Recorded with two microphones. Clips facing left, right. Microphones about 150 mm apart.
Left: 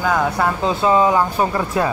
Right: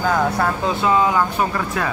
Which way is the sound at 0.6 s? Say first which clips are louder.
Left 3 dB; 30° left (ahead or behind).